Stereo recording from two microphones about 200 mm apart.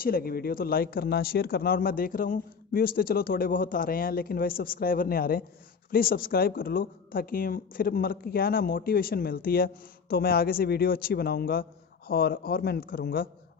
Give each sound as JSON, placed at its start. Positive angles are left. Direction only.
{"t": 0.0, "sound": "speech", "side_deg": 50}